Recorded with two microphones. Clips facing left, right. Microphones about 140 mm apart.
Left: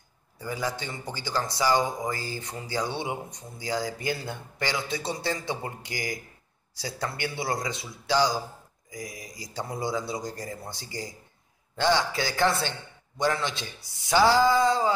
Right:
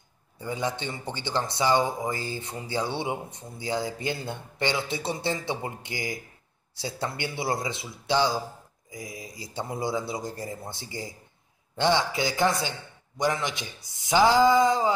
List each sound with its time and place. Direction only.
0.4 s a man's voice: 25° right (ahead or behind)